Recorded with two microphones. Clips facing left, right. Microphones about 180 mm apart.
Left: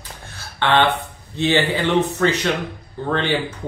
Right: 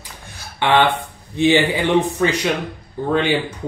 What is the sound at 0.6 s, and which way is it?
Speech, 15° right (ahead or behind).